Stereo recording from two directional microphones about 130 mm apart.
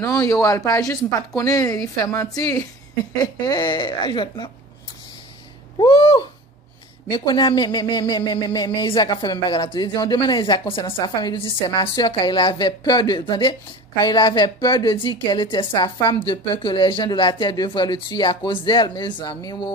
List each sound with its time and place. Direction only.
0.0 s speech: 25° left (ahead or behind)
5.8 s speech: 40° left (ahead or behind)